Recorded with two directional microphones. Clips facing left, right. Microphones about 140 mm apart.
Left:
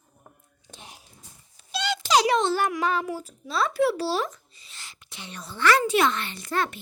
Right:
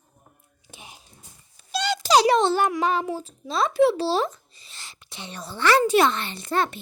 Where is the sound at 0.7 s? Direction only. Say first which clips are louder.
Right 1 dB; 5° right (ahead or behind).